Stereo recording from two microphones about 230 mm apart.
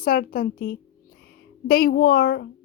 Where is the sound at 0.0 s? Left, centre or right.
Left.